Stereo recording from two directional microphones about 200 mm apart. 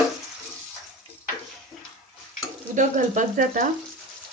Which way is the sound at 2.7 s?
40° right (ahead or behind).